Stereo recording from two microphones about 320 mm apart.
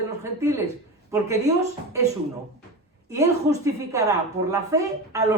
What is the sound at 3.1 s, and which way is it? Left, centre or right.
A woman's voice, centre.